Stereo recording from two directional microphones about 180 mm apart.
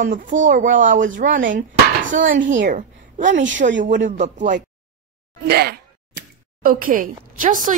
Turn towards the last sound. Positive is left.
turn(degrees=-45)  # may be behind; listen again after turning